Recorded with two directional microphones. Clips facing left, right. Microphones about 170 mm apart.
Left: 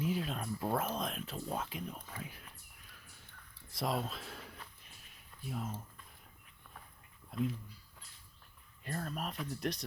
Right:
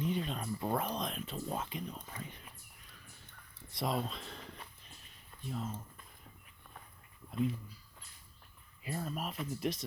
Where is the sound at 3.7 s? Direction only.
Centre (ahead or behind).